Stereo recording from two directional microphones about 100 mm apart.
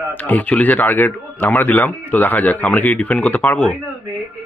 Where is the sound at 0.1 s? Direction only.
15° left (ahead or behind).